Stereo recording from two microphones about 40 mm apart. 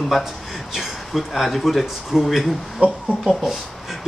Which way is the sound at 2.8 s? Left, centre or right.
Right.